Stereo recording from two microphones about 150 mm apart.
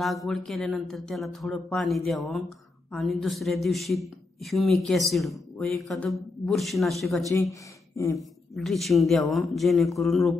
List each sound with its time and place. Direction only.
0.0 s a man's voice: centre (ahead or behind)
7.9 s speech: 20° left (ahead or behind)
8.2 s a man's voice: centre (ahead or behind)